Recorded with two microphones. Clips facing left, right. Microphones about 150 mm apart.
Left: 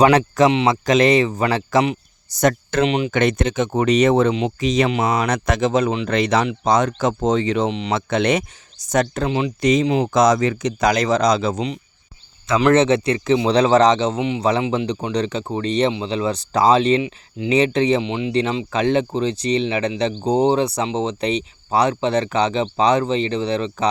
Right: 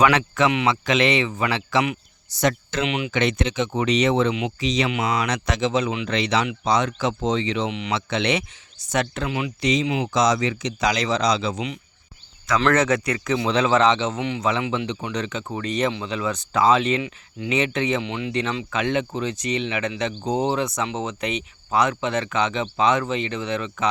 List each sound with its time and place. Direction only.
0.0 s speech: 35° left (ahead or behind)
3.1 s speech: 50° left (ahead or behind)
4.9 s speech: 35° left (ahead or behind)
5.3 s speech: 50° left (ahead or behind)
7.7 s speech: 35° left (ahead or behind)
7.9 s speech: 45° left (ahead or behind)
9.6 s speech: 45° left (ahead or behind)
10.2 s speech: 50° left (ahead or behind)
12.5 s speech: 20° left (ahead or behind)
13.5 s speech: 35° left (ahead or behind)
14.2 s speech: 20° left (ahead or behind)
14.4 s speech: 35° left (ahead or behind)
18.0 s speech: 20° left (ahead or behind)